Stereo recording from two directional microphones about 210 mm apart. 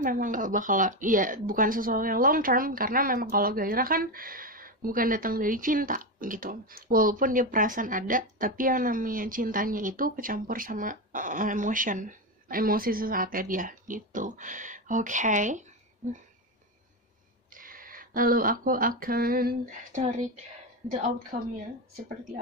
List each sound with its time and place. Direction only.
0.0 s speech: 40° right (ahead or behind)
17.6 s speech: 40° right (ahead or behind)